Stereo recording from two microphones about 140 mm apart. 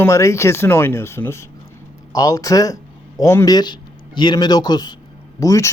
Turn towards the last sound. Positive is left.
turn(degrees=25)  # may be behind; listen again after turning